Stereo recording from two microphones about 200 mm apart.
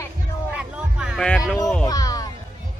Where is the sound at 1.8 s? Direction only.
20° left (ahead or behind).